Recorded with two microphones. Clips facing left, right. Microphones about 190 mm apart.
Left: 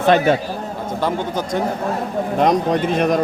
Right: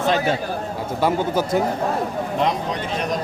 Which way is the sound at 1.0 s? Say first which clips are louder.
Right 2 dB; 5° right (ahead or behind).